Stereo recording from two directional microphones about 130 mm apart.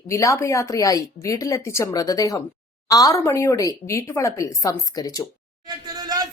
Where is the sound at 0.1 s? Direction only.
25° left (ahead or behind).